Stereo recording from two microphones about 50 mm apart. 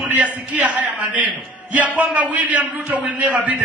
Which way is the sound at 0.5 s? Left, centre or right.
Right.